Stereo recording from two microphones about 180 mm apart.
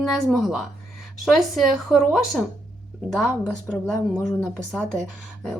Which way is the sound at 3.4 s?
5° left (ahead or behind).